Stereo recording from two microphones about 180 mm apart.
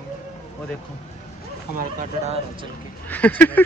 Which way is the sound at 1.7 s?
50° right (ahead or behind).